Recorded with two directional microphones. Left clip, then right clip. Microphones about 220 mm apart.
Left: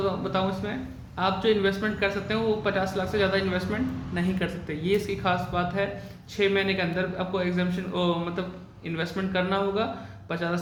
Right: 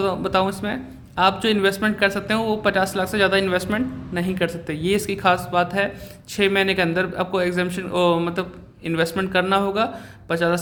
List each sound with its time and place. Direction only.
0.0 s a man's voice: 50° right (ahead or behind)